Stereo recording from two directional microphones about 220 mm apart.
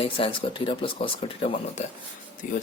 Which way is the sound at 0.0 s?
25° left (ahead or behind).